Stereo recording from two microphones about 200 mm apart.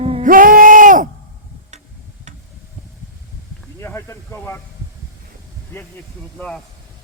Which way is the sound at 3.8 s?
15° left (ahead or behind).